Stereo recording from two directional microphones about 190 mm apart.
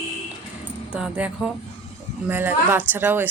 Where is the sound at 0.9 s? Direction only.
5° right (ahead or behind).